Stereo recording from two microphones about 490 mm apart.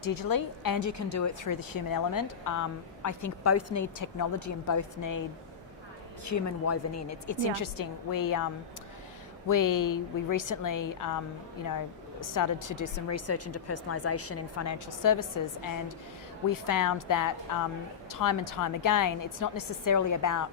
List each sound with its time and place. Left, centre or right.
0.0 s speech: left
6.2 s speech: left
9.5 s speech: left
12.3 s speech: left
16.5 s speech: left